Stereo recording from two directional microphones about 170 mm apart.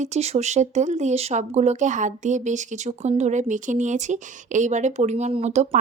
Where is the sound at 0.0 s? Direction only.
40° right (ahead or behind).